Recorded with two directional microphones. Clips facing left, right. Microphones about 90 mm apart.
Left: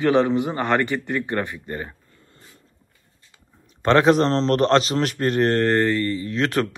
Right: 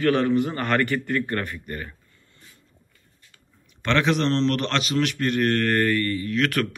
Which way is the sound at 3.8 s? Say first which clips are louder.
Left 6 dB; 40° left (ahead or behind).